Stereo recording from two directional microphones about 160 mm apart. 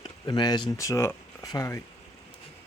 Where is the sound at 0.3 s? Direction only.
25° left (ahead or behind).